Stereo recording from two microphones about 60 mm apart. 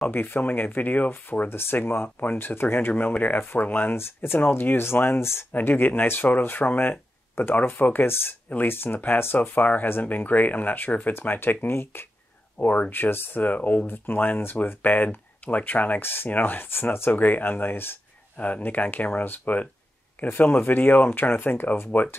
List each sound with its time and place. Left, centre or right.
0.1 s speech: left
1.5 s speech: left
2.9 s speech: left
3.9 s speech: left
4.4 s speech: left
5.5 s speech: left
12.5 s speech: left
13.8 s speech: left
17.1 s speech: left